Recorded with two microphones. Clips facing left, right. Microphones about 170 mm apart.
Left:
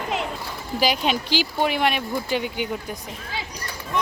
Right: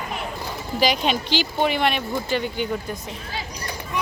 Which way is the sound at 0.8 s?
5° left (ahead or behind).